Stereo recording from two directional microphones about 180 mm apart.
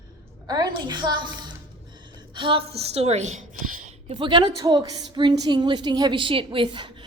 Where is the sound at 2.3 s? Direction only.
30° right (ahead or behind).